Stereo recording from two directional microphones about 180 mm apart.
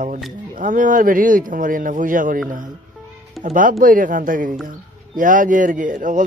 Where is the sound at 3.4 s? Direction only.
50° right (ahead or behind).